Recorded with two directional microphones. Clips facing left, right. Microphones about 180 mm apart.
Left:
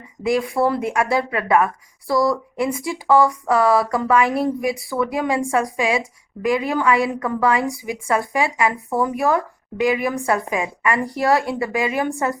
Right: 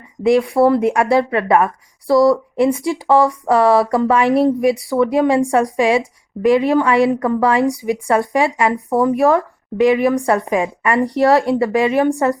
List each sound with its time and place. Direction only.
0.2 s a woman's voice: 30° right (ahead or behind)